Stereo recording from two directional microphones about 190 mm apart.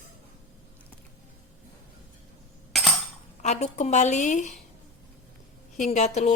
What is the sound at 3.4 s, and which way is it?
Speech, 35° left (ahead or behind).